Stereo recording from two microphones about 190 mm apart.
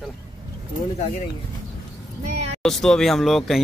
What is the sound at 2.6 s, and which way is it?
A man's voice, centre (ahead or behind).